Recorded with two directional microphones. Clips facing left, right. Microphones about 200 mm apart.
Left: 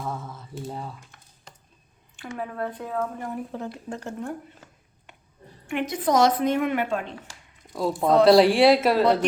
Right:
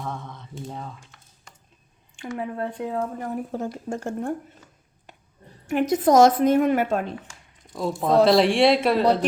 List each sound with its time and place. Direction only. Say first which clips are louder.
0.0 s a sound: left 1 dB; 5° left (ahead or behind)
2.4 s speech: right 2 dB; 25° right (ahead or behind)
3.5 s a woman's voice: right 4 dB; 45° right (ahead or behind)
5.6 s a woman's voice: right 5 dB; 40° right (ahead or behind)
7.7 s speech: left 1 dB; centre (ahead or behind)